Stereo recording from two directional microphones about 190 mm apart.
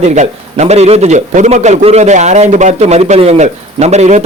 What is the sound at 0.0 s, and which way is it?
A man's voice, 40° right (ahead or behind).